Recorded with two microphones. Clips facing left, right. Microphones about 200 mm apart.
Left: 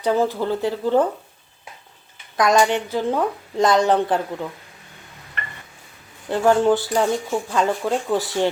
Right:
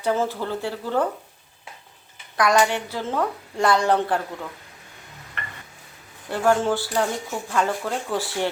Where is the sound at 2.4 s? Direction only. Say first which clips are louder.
Left 3 dB; 20° left (ahead or behind).